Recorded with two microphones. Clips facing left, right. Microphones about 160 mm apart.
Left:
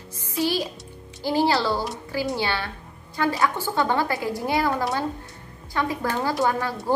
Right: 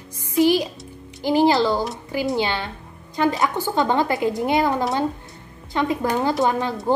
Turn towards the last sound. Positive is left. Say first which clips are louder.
# right 3 dB
turn(degrees=-20)  # may be behind; listen again after turning